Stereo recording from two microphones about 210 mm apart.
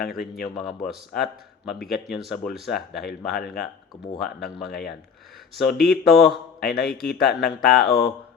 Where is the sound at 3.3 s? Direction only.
50° left (ahead or behind).